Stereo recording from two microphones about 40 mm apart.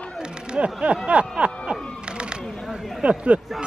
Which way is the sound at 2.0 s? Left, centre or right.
Right.